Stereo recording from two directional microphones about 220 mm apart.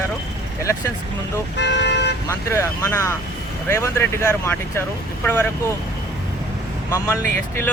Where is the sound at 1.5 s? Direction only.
50° left (ahead or behind).